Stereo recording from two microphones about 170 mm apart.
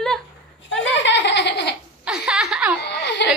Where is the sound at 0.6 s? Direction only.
90° left.